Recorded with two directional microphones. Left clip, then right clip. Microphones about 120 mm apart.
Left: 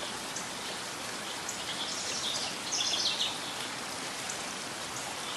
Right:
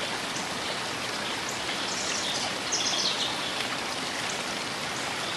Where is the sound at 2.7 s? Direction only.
15° left (ahead or behind).